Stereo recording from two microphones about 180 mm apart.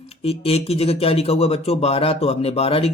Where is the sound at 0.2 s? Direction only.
35° left (ahead or behind).